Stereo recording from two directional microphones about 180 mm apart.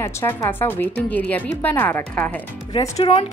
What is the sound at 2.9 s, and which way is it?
Speech, 35° left (ahead or behind).